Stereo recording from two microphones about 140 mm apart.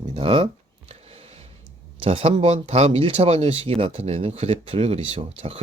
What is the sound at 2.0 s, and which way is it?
Speech, 45° right (ahead or behind).